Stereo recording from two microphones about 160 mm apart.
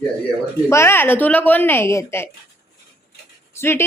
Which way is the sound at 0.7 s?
15° left (ahead or behind).